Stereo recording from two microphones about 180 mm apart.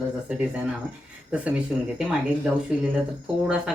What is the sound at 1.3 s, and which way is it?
Speech, 5° right (ahead or behind).